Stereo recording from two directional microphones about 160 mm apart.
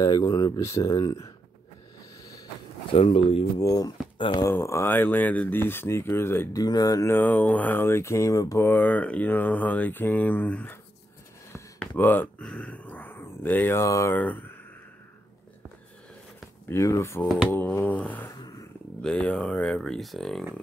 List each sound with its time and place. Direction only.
0.0 s speech: 25° left (ahead or behind)
2.9 s speech: 40° left (ahead or behind)
3.5 s speech: 25° left (ahead or behind)
11.8 s speech: 10° left (ahead or behind)
16.3 s a sound: 15° left (ahead or behind)
17.5 s speech: 10° left (ahead or behind)